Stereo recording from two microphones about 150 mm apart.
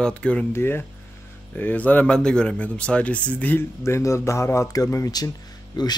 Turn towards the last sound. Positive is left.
turn(degrees=30)  # may be behind; listen again after turning